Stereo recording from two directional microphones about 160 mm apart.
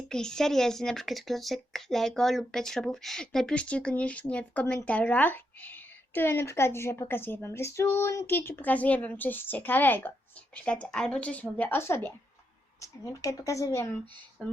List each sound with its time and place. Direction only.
0.1 s speech: 5° left (ahead or behind)
14.4 s speech: 5° left (ahead or behind)